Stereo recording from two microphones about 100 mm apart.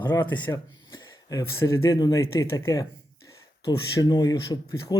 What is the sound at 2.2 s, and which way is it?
Speech, 30° left (ahead or behind).